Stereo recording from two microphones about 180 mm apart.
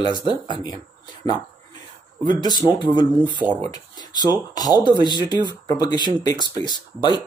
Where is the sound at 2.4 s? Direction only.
25° left (ahead or behind).